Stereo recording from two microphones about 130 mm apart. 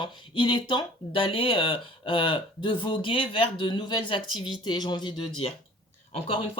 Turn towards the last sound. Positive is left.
turn(degrees=45)  # may be behind; listen again after turning